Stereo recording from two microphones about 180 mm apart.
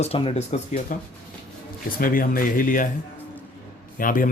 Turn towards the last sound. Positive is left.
turn(degrees=50)  # may be behind; listen again after turning